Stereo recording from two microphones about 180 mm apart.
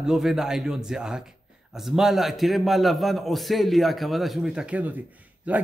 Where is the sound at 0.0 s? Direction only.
5° right (ahead or behind).